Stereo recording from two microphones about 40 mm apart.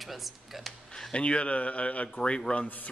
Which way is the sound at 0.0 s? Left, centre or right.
Centre.